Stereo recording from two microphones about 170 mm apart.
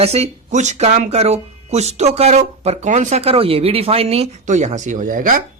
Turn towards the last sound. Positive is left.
turn(degrees=-50)  # may be behind; listen again after turning